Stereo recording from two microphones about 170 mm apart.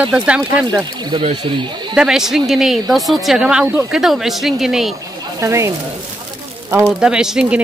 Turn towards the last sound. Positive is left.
turn(degrees=-5)  # may be behind; listen again after turning